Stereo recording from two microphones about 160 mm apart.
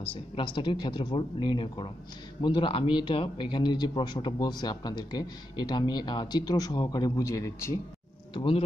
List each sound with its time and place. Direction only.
0.1 s a man's voice: 30° left (ahead or behind)
8.3 s speech: 30° left (ahead or behind)